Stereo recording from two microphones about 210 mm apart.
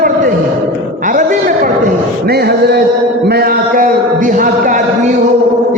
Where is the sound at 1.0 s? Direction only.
40° right (ahead or behind).